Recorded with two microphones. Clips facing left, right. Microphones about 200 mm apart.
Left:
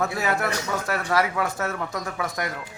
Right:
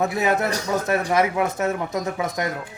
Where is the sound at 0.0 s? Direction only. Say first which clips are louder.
Right 4 dB; 20° right (ahead or behind).